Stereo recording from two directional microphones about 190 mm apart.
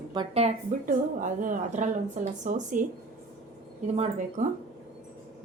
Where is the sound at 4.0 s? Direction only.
40° right (ahead or behind).